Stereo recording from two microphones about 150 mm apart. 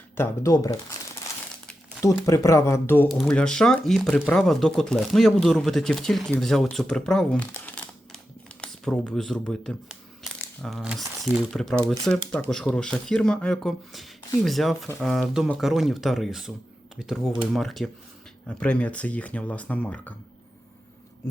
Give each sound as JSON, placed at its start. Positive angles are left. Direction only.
{"t": 0.2, "sound": "speech", "side_deg": 20}
{"t": 2.0, "sound": "speech", "side_deg": 20}